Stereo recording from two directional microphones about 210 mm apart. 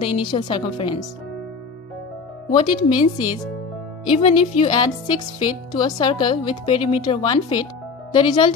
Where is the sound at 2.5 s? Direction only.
20° left (ahead or behind).